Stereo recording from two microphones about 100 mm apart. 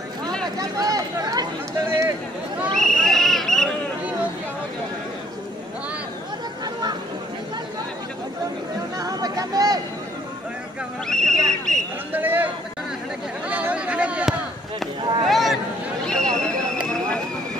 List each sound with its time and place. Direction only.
0.6 s speech: 35° right (ahead or behind)
2.7 s a sound: 5° left (ahead or behind)
6.6 s chatter: 45° right (ahead or behind)
8.9 s speech: 40° right (ahead or behind)
11.1 s speech: 5° left (ahead or behind)
12.1 s speech: 20° right (ahead or behind)
13.5 s speech: 15° right (ahead or behind)
15.2 s a sound: centre (ahead or behind)